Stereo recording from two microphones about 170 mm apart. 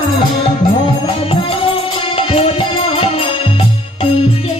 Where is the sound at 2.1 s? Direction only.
35° left (ahead or behind).